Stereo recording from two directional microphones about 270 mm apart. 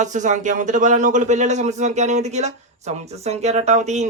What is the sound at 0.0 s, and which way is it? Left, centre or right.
Speech, right.